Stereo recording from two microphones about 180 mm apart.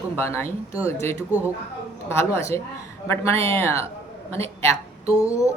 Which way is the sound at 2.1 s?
15° left (ahead or behind).